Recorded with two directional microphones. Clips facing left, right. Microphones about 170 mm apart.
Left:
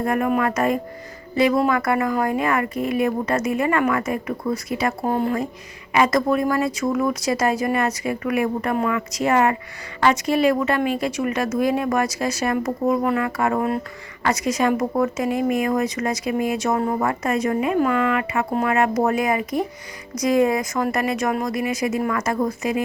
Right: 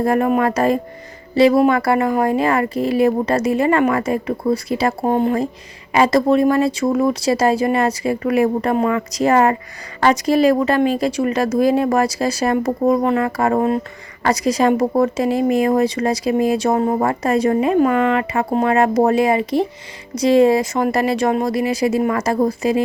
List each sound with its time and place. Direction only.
0.0 s speech: 30° right (ahead or behind)